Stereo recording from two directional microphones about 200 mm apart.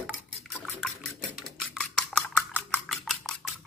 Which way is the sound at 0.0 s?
Centre (ahead or behind).